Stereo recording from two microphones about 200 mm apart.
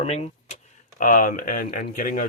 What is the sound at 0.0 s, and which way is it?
Speech, 30° left (ahead or behind).